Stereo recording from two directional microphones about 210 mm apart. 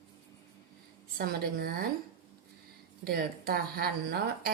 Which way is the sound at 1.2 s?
45° right (ahead or behind).